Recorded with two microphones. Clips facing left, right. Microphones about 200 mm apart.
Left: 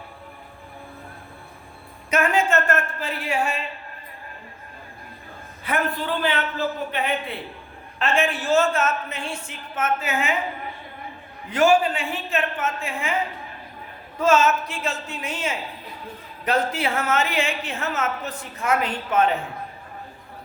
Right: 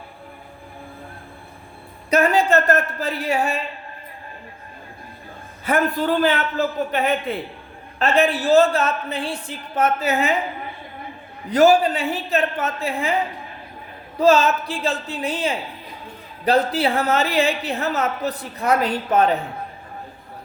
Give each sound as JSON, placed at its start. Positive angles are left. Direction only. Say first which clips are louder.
{"t": 2.0, "sound": "a woman's voice", "louder": "right 4 dB", "side_deg": -35}
{"t": 5.6, "sound": "a man's voice", "louder": "right 6 dB", "side_deg": -45}
{"t": 11.4, "sound": "a woman's voice", "louder": "right 4 dB", "side_deg": -40}
{"t": 14.2, "sound": "a woman's voice", "louder": "right 3 dB", "side_deg": -35}